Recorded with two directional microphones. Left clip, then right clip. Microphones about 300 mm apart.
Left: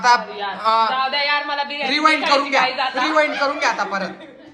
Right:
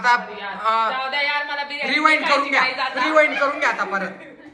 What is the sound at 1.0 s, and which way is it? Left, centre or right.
Speech, left.